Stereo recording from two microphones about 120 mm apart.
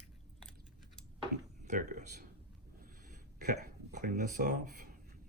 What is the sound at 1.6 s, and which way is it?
Speech, 90° right.